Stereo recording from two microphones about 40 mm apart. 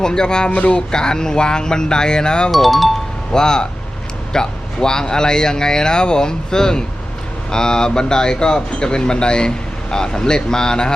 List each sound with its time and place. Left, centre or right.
0.0 s speech: centre
0.5 s speech: left
0.8 s speech: centre
2.5 s speech: centre
3.3 s a man's voice: centre